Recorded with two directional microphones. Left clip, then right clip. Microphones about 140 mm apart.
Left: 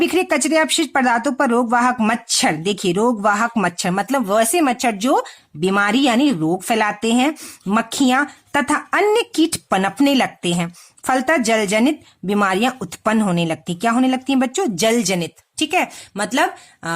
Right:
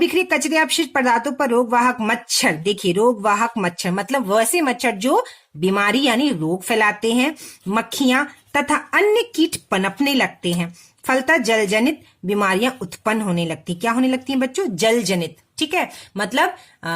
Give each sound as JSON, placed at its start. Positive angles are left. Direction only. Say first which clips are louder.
{"t": 0.0, "sound": "speech", "louder": "left 1 dB", "side_deg": 35}